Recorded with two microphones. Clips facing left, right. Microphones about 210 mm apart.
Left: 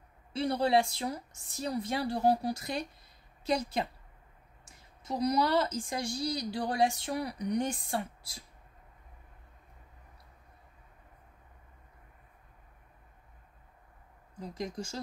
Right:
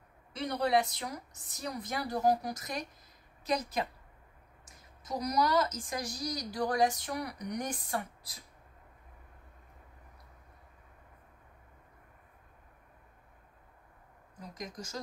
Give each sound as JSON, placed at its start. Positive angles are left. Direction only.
{"t": 0.3, "sound": "a woman's voice", "side_deg": 30}
{"t": 14.4, "sound": "a woman's voice", "side_deg": 30}